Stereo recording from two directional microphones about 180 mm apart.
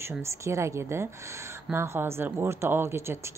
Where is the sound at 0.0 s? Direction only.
15° right (ahead or behind).